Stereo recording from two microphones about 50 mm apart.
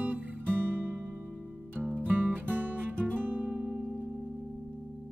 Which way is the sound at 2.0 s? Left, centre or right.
Right.